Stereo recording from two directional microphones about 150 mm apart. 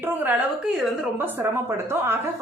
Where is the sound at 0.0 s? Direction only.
10° right (ahead or behind).